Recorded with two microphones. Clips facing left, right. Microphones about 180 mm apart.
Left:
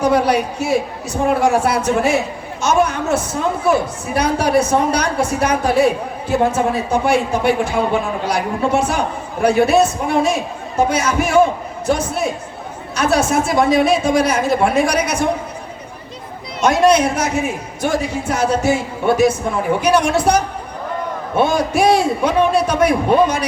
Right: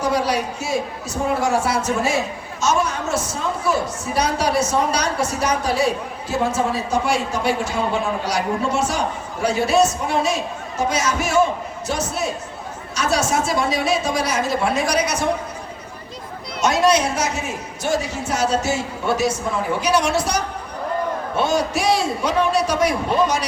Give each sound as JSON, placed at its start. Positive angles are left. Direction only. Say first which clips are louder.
{"t": 0.0, "sound": "a woman's voice", "louder": "left 5 dB", "side_deg": 55}
{"t": 16.6, "sound": "a woman's voice", "louder": "left 4 dB", "side_deg": 55}